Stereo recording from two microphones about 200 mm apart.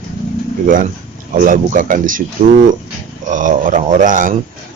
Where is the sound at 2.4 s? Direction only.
30° right (ahead or behind).